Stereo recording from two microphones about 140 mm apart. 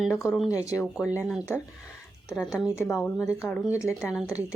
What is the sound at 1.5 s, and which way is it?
Speech, 20° left (ahead or behind).